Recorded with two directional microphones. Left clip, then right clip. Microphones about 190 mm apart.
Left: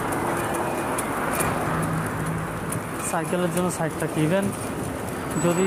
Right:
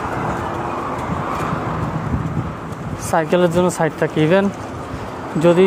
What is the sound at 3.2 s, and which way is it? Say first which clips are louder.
Speech: right 11 dB; 55° right (ahead or behind).